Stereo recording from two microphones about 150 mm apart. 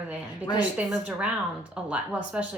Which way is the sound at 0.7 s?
5° right (ahead or behind).